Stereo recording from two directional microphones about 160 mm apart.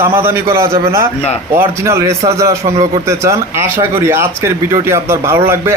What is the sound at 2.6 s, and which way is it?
Speech, 40° right (ahead or behind).